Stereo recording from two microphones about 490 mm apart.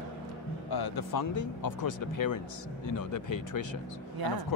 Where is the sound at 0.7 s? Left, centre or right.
Left.